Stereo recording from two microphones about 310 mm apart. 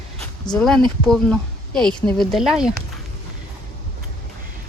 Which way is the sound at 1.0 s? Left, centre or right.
Centre.